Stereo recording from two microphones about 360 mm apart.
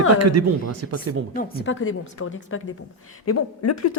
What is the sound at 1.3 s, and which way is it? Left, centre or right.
A woman's voice, left.